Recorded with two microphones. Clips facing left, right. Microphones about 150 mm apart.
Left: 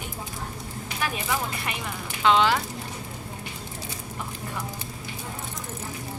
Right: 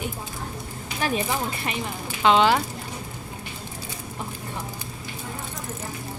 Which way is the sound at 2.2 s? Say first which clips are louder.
Right 3 dB; 20° right (ahead or behind).